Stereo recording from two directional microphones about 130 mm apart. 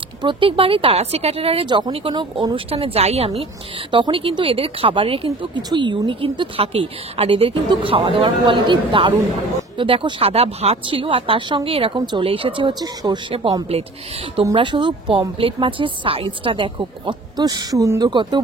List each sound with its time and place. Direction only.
0.2 s a woman's voice: 40° right (ahead or behind)
3.9 s a woman's voice: 40° right (ahead or behind)
5.6 s a woman's voice: 35° right (ahead or behind)